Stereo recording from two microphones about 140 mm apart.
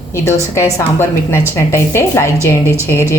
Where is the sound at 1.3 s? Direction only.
15° left (ahead or behind).